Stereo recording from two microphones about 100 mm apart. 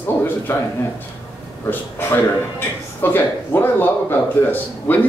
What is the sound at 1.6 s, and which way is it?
Speech, 20° left (ahead or behind).